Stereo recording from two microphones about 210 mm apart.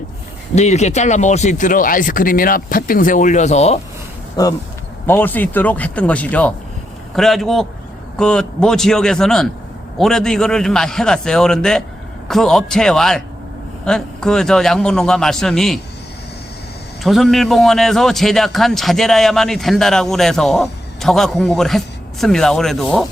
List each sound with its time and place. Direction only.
0.5 s speech: 30° left (ahead or behind)
4.4 s a man's voice: 20° left (ahead or behind); by 15.8 s centre (ahead or behind)
17.0 s a man's voice: centre (ahead or behind)